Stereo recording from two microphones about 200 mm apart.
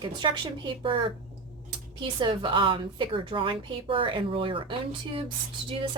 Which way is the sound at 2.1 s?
25° right (ahead or behind).